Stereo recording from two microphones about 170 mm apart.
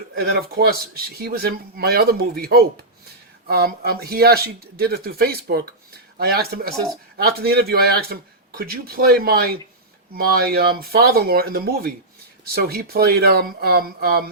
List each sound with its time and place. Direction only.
0.2 s speech: 65° right (ahead or behind)